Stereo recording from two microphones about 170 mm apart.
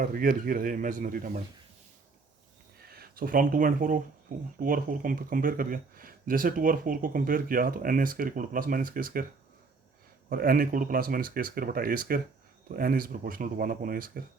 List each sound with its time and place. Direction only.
0.0 s speech: 55° right (ahead or behind)
2.8 s speech: 65° right (ahead or behind)
10.2 s speech: 55° right (ahead or behind)